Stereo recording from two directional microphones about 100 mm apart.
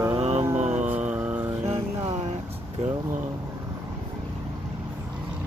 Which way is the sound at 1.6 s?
80° right.